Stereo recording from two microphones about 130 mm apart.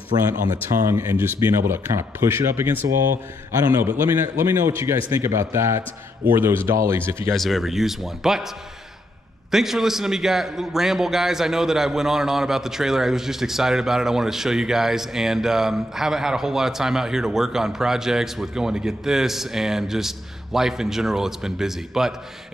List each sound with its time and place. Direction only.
0.8 s speech: 20° right (ahead or behind)
7.3 s a man's voice: centre (ahead or behind)
9.5 s a man's voice: 5° right (ahead or behind)